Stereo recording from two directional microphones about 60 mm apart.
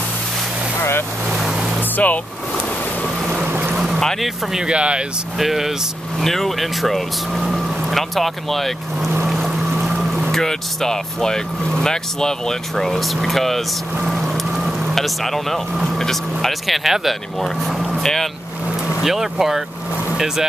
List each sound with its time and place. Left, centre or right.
0.7 s boat: left
1.3 s boat: centre
1.8 s vehicle: left
3.7 s vehicle: centre
4.0 s speech: centre
4.5 s speech: centre
5.4 s speech: centre
9.3 s boat: centre
10.3 s speech: centre
14.0 s vehicle: centre
15.0 s speech: centre
19.0 s speech: centre